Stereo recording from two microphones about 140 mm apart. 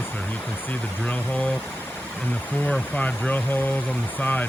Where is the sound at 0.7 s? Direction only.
10° left (ahead or behind).